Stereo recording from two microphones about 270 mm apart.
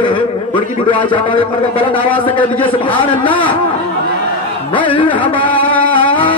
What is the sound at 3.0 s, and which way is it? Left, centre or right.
Speech, centre.